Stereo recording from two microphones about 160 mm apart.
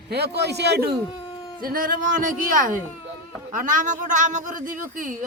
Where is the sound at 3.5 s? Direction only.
55° right (ahead or behind).